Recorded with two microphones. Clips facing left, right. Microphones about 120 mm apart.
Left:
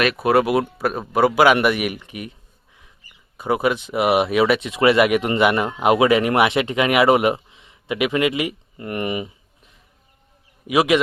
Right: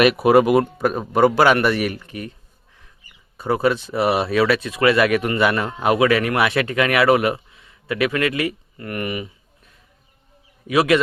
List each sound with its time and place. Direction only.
0.0 s a man's voice: 5° right (ahead or behind); by 2.3 s 15° left (ahead or behind)
3.3 s a man's voice: 15° left (ahead or behind)